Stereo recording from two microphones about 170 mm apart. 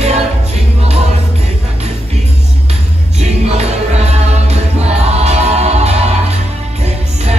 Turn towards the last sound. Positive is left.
turn(degrees=-40)  # may be behind; listen again after turning